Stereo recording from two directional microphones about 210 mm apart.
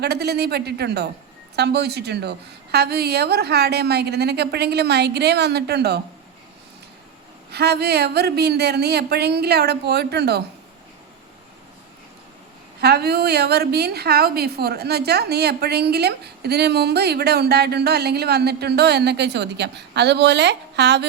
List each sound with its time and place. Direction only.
0.0 s a woman's voice: 50° right (ahead or behind)
7.5 s a woman's voice: 50° right (ahead or behind)
12.8 s a woman's voice: 50° right (ahead or behind)